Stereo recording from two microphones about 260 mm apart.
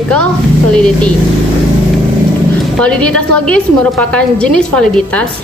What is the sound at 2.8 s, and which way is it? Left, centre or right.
A woman's voice, centre.